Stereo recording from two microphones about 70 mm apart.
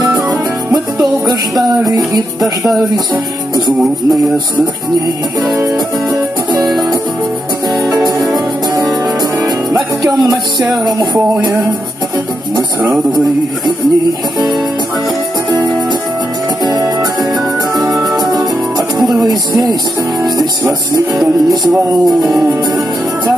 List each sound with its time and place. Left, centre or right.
2.0 s speech: centre
10.2 s music: right
18.0 s music: centre
20.3 s music: right
22.0 s speech: centre